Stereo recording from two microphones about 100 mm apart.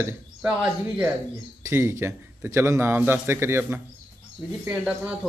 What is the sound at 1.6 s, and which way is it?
Speech, 25° right (ahead or behind).